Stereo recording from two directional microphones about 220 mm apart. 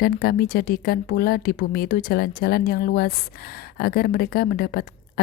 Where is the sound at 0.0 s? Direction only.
40° left (ahead or behind).